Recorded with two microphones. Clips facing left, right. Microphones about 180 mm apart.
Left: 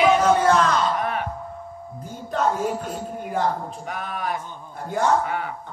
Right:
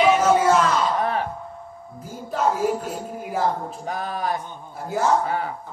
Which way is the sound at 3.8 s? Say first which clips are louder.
Right 3 dB; 35° right (ahead or behind).